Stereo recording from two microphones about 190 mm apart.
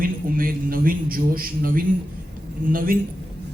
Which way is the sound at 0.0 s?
50° right (ahead or behind).